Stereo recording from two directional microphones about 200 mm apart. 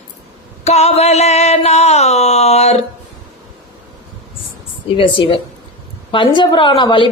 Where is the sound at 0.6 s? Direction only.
35° left (ahead or behind).